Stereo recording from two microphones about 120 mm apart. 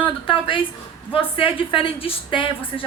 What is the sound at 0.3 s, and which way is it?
A woman's voice, 45° left (ahead or behind).